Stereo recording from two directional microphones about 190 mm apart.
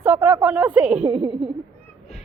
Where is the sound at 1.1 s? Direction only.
25° right (ahead or behind).